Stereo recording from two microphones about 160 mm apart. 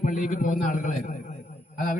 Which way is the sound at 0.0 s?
55° left (ahead or behind).